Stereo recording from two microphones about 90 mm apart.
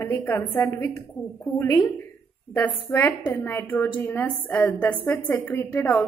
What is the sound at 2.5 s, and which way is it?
A woman's voice, 15° left (ahead or behind).